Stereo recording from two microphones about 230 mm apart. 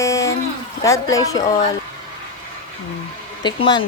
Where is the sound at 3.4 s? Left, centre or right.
Centre.